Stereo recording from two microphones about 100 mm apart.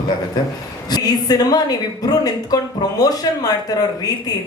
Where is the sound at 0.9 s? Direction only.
40° left (ahead or behind).